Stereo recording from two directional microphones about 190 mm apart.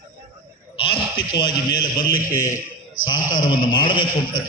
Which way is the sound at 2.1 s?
50° left (ahead or behind).